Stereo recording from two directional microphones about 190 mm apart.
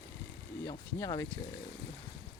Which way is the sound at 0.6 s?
20° left (ahead or behind).